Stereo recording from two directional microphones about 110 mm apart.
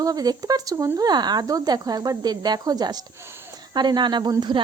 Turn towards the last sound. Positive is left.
turn(degrees=-40)  # may be behind; listen again after turning